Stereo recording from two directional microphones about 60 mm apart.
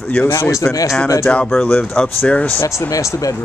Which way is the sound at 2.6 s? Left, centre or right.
Left.